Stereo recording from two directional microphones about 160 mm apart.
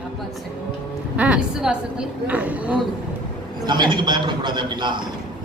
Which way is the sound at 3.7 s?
25° right (ahead or behind).